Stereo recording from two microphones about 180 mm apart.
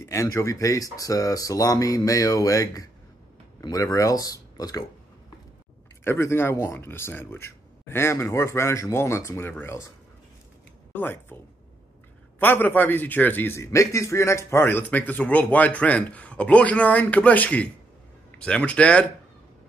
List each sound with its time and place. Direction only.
0.0 s speech: 15° left (ahead or behind)
6.0 s a man's voice: 15° left (ahead or behind)
10.9 s a man's voice: 10° left (ahead or behind)
12.4 s a man's voice: 10° left (ahead or behind)